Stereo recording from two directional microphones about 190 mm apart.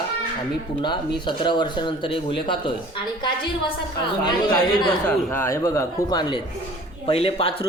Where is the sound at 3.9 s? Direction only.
25° left (ahead or behind).